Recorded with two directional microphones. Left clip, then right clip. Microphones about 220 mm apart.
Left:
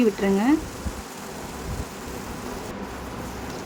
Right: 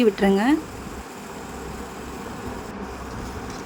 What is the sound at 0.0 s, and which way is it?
Speech, 20° right (ahead or behind).